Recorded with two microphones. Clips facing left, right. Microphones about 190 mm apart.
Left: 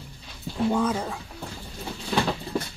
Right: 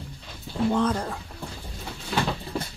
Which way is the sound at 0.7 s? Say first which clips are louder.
Even; 5° left (ahead or behind).